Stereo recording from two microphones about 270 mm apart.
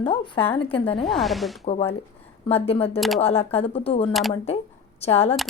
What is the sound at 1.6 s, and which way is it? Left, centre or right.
Speech, left.